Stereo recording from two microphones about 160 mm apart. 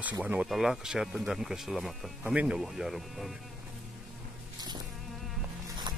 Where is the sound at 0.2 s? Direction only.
5° right (ahead or behind).